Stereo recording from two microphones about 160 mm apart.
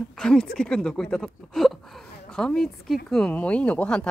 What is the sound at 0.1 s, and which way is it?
A woman's voice, 5° left (ahead or behind).